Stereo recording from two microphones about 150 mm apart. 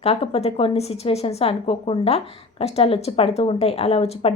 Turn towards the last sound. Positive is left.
turn(degrees=40)  # may be behind; listen again after turning